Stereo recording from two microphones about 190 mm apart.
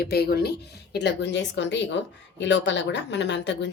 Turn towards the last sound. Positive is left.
turn(degrees=65)  # may be behind; listen again after turning